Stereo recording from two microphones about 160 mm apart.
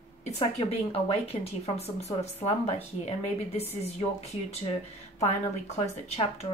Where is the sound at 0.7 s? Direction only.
40° left (ahead or behind).